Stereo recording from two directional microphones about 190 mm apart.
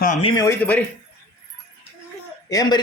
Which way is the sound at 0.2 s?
30° left (ahead or behind).